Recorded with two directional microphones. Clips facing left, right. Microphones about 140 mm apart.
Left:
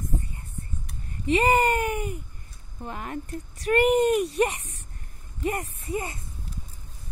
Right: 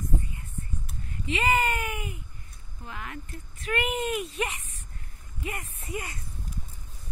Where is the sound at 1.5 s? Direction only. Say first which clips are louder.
Left 5 dB; 40° left (ahead or behind).